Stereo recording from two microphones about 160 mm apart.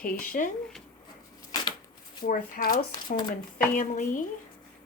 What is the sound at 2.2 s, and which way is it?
Speech, 65° left (ahead or behind).